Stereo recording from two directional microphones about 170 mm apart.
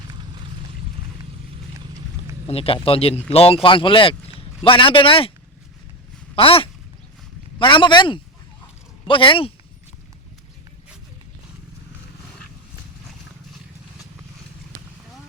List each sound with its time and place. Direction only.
0.1 s clip-clop: 30° right (ahead or behind)
2.5 s speech: 35° left (ahead or behind)
6.3 s speech: 30° left (ahead or behind)